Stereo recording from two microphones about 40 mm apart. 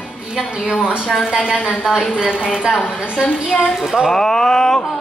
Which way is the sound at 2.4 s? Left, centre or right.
Centre.